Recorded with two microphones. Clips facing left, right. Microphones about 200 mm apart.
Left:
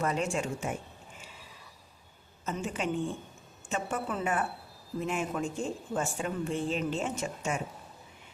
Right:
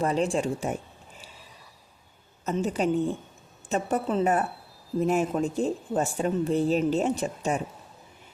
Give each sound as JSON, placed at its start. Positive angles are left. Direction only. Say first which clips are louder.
{"t": 0.0, "sound": "speech", "louder": "right 5 dB", "side_deg": -30}
{"t": 2.4, "sound": "speech", "louder": "right 7 dB", "side_deg": -40}